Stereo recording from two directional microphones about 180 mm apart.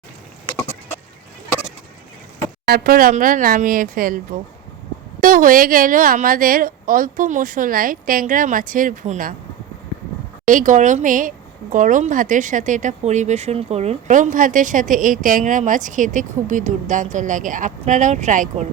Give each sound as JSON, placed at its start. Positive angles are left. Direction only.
{"t": 2.6, "sound": "speech", "side_deg": -55}
{"t": 5.2, "sound": "speech", "side_deg": -50}
{"t": 10.4, "sound": "speech", "side_deg": -45}